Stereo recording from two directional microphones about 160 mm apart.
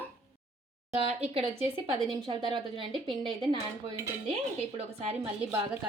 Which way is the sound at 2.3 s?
35° right (ahead or behind).